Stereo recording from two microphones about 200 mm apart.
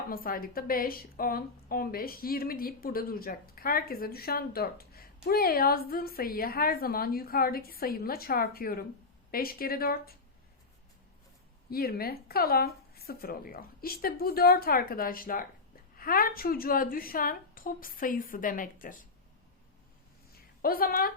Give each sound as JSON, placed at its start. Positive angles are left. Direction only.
{"t": 0.1, "sound": "a woman's voice", "side_deg": 45}
{"t": 11.7, "sound": "a woman's voice", "side_deg": 50}
{"t": 20.6, "sound": "a woman's voice", "side_deg": 45}